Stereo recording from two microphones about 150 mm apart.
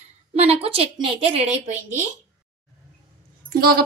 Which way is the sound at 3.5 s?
85° right.